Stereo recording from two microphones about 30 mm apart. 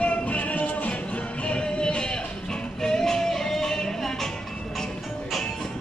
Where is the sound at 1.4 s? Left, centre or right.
Left.